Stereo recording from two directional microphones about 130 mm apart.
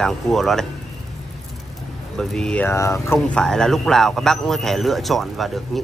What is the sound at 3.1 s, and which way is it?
A man's voice, 5° left (ahead or behind).